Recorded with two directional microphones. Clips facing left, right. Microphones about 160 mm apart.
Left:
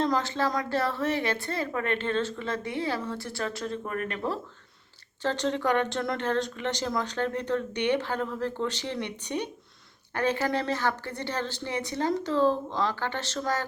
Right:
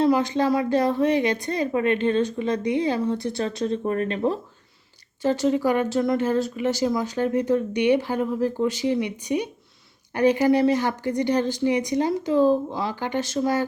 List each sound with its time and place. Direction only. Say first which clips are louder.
0.0 s speech: right 7 dB; 15° right (ahead or behind)
5.2 s speech: right 6 dB; 10° right (ahead or behind)